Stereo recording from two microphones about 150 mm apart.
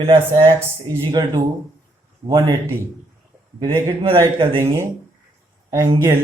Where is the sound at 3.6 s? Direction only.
20° right (ahead or behind).